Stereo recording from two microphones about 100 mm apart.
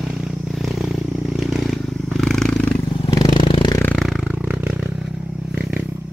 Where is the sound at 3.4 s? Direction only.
65° left (ahead or behind).